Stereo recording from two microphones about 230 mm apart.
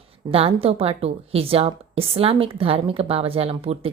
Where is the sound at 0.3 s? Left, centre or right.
Right.